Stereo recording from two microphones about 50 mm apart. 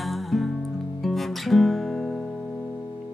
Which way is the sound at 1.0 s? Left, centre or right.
Centre.